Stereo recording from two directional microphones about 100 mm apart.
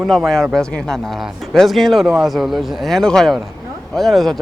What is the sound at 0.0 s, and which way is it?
Speech, centre (ahead or behind).